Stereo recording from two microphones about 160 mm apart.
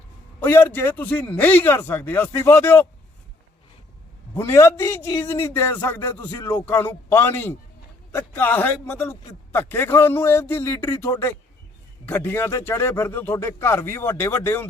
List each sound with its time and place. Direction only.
0.3 s a man's voice: 15° left (ahead or behind)
4.4 s a man's voice: 20° left (ahead or behind)